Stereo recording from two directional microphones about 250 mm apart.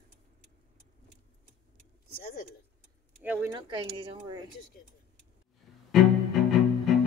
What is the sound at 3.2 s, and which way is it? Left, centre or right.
Speech, centre.